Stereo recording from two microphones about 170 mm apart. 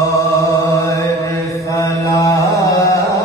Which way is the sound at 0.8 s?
20° left (ahead or behind).